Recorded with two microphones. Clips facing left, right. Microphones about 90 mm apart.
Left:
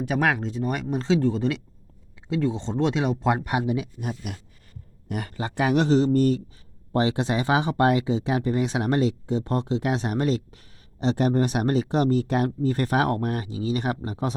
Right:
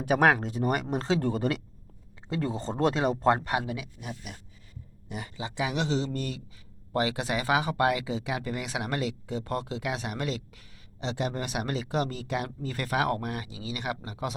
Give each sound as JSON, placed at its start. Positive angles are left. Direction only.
{"t": 0.4, "sound": "speech", "side_deg": -50}
{"t": 2.4, "sound": "speech", "side_deg": -5}
{"t": 3.2, "sound": "speech", "side_deg": 15}
{"t": 5.0, "sound": "speech", "side_deg": 55}
{"t": 6.9, "sound": "speech", "side_deg": 30}